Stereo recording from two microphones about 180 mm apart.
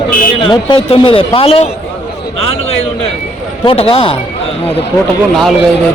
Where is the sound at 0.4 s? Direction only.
30° left (ahead or behind).